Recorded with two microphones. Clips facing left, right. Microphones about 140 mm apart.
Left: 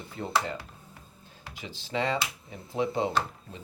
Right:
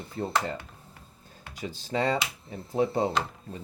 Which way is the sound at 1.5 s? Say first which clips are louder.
Right 2 dB; 45° right (ahead or behind).